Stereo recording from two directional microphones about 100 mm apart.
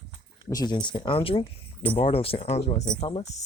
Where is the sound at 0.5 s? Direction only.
45° left (ahead or behind); by 3.3 s 80° left.